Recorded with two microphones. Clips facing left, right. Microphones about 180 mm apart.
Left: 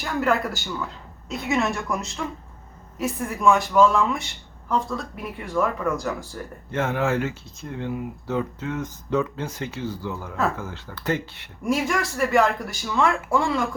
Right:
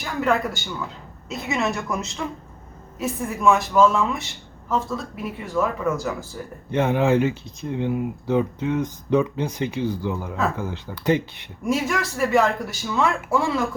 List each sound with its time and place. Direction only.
0.0 s speech: centre (ahead or behind)
6.7 s speech: 15° right (ahead or behind)
11.6 s speech: centre (ahead or behind)